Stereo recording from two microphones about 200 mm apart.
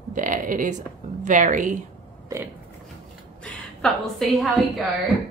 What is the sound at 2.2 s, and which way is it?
Burping, 10° right (ahead or behind).